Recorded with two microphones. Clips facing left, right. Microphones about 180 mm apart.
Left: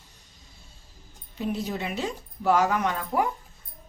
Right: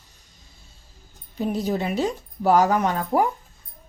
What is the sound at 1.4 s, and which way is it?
Speech, 40° right (ahead or behind).